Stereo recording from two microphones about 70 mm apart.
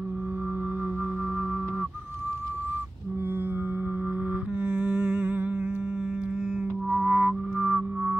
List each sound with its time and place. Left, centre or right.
4.6 s music: right
6.9 s music: right